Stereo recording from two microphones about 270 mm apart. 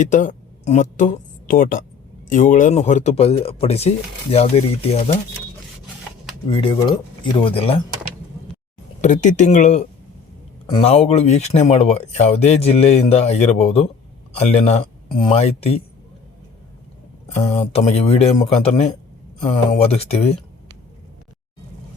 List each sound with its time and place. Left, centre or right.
0.0 s speech: left
6.5 s speech: centre
9.0 s speech: left
17.4 s speech: left